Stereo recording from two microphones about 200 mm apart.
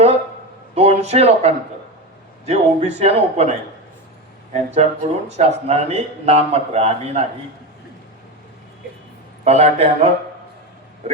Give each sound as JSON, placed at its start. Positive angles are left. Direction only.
{"t": 0.8, "sound": "speech", "side_deg": -30}
{"t": 4.5, "sound": "speech", "side_deg": -35}
{"t": 9.4, "sound": "speech", "side_deg": -30}